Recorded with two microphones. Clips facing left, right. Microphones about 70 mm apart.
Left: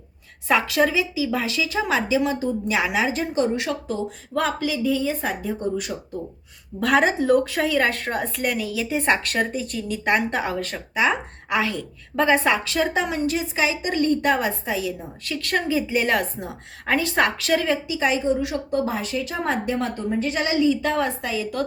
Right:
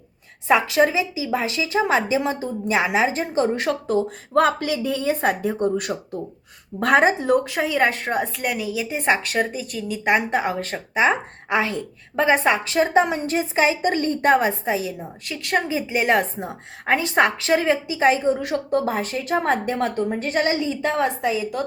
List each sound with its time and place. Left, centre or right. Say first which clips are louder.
0.4 s a woman's voice: right 2 dB; centre; by 3.9 s right
4.4 s speech: right 4 dB; right
6.7 s a woman's voice: right 2 dB; right
7.2 s a woman's voice: left 1 dB; centre
10.0 s a woman's voice: right 2 dB; centre
13.0 s a woman's voice: right 4 dB; right
20.6 s a woman's voice: left 2 dB; right